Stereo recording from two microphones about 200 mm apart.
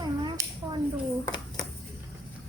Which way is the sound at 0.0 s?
20° right (ahead or behind).